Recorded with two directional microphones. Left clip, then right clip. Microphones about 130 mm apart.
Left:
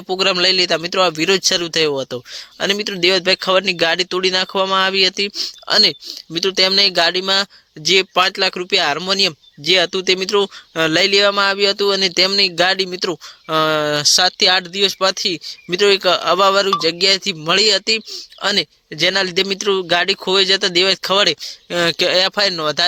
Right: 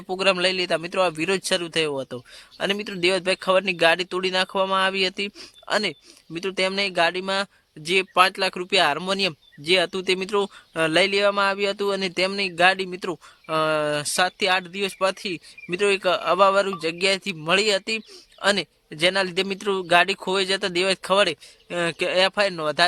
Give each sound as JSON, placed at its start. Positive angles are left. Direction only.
{"t": 0.1, "sound": "speech", "side_deg": 25}
{"t": 5.6, "sound": "speech", "side_deg": 40}